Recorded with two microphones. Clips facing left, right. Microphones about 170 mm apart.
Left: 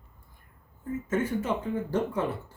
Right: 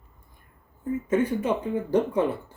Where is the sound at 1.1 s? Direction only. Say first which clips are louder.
Right 4 dB; 15° right (ahead or behind).